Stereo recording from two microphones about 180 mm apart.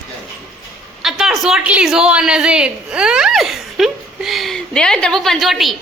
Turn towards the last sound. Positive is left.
turn(degrees=0)  # may be behind; listen again after turning